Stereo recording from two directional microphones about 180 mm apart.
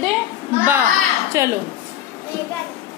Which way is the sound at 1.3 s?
15° right (ahead or behind).